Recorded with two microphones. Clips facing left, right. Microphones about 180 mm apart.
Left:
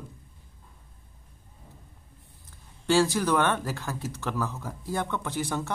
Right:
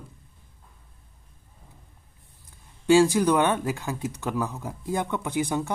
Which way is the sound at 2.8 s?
15° right (ahead or behind).